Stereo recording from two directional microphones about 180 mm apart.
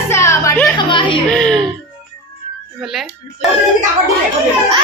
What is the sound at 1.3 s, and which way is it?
Music, 5° left (ahead or behind).